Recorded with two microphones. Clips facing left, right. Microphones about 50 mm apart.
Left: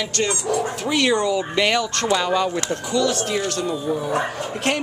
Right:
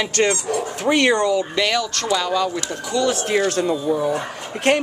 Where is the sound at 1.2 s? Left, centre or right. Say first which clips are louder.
Right 2 dB; centre.